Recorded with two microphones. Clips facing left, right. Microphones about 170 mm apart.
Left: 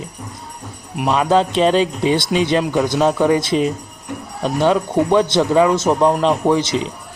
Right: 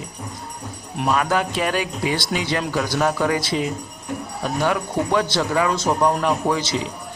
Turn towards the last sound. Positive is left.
turn(degrees=20)  # may be behind; listen again after turning